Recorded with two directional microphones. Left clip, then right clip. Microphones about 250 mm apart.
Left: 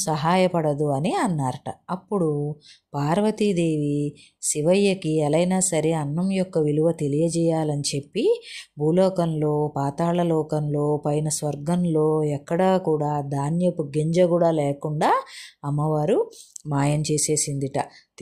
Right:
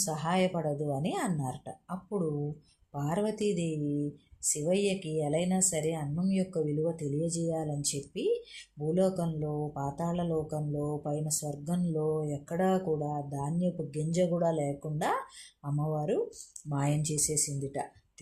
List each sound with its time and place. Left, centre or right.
0.0 s speech: left